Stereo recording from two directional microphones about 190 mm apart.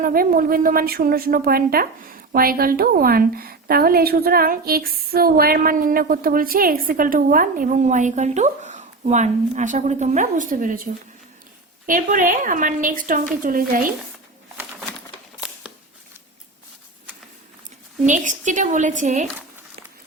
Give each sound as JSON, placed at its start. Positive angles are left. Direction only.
{"t": 0.0, "sound": "a woman's voice", "side_deg": -50}
{"t": 11.9, "sound": "a woman's voice", "side_deg": -45}
{"t": 15.4, "sound": "a sound", "side_deg": -5}
{"t": 18.0, "sound": "a woman's voice", "side_deg": -40}